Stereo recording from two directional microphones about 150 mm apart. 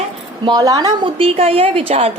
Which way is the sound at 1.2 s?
40° right (ahead or behind).